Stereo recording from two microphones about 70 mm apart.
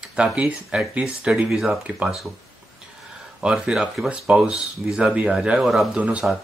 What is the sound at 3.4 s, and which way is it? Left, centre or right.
Speech, centre.